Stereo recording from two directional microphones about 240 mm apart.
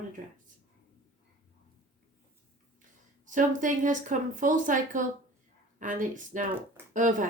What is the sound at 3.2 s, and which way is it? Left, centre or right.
Speech, right.